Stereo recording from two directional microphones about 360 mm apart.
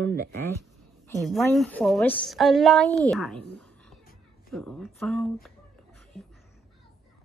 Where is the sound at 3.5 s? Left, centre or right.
Centre.